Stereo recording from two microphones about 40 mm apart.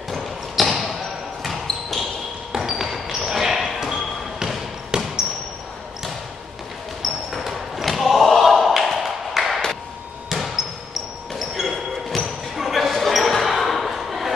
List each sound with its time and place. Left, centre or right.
0.1 s basketball bounce: centre
4.9 s basketball bounce: right
7.3 s a sound: centre
10.3 s basketball bounce: centre
11.3 s a sound: centre
12.5 s basketball bounce: centre